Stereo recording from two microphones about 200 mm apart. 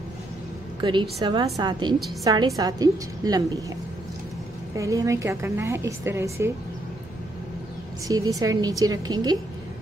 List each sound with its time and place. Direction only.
0.7 s a woman's voice: 25° right (ahead or behind)
4.7 s a woman's voice: 15° right (ahead or behind)
8.1 s a woman's voice: 15° right (ahead or behind)